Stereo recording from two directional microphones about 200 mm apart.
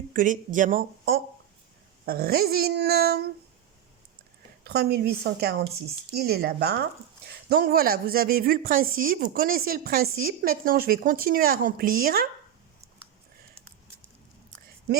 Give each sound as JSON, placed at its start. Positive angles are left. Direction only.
{"t": 0.1, "sound": "speech", "side_deg": -40}
{"t": 4.6, "sound": "speech", "side_deg": -55}